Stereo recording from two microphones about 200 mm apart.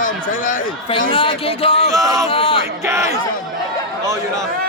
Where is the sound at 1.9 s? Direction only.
15° right (ahead or behind).